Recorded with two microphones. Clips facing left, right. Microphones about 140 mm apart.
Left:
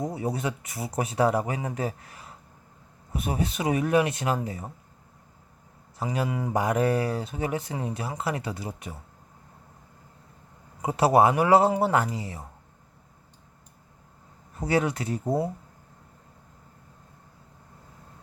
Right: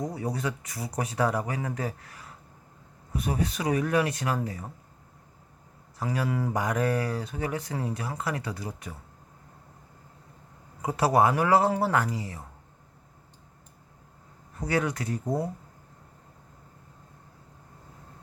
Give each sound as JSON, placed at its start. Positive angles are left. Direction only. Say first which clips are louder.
{"t": 0.0, "sound": "speech", "louder": "left 2 dB", "side_deg": 25}
{"t": 6.0, "sound": "speech", "louder": "even", "side_deg": 20}
{"t": 6.5, "sound": "speech", "louder": "left 5 dB", "side_deg": 25}
{"t": 10.8, "sound": "speech", "louder": "left 3 dB", "side_deg": 25}
{"t": 14.6, "sound": "speech", "louder": "left 3 dB", "side_deg": 25}